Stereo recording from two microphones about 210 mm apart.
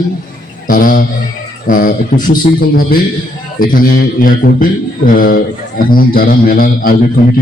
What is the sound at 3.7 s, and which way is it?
A man's voice, 40° left (ahead or behind).